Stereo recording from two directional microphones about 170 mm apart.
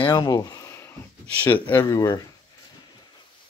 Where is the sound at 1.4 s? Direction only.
10° left (ahead or behind).